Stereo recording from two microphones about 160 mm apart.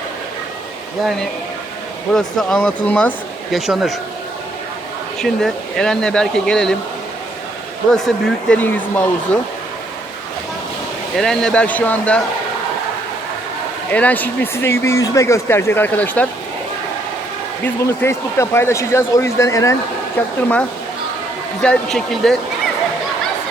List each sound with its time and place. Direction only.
1.0 s speech: centre (ahead or behind)
3.5 s speech: centre (ahead or behind)
5.2 s speech: 5° left (ahead or behind)
7.9 s speech: 5° left (ahead or behind)
11.2 s speech: 5° left (ahead or behind)
13.9 s speech: 10° left (ahead or behind)
17.8 s speech: 15° left (ahead or behind)
20.1 s speech: 10° left (ahead or behind)